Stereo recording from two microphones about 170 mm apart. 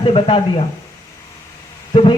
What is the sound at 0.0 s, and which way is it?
Speech, 30° left (ahead or behind).